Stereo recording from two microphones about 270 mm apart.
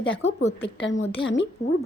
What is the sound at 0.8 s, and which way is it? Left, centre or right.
Speech, left.